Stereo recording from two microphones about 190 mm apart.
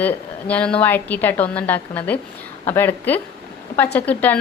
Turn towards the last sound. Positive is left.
turn(degrees=10)  # may be behind; listen again after turning